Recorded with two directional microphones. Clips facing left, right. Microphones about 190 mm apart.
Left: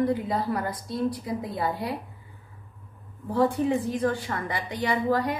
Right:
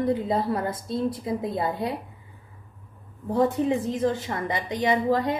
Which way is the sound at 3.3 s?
20° right (ahead or behind).